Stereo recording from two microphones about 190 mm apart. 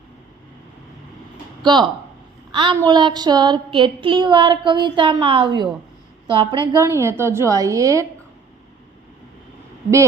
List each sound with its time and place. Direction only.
2.5 s a woman's voice: 25° right (ahead or behind)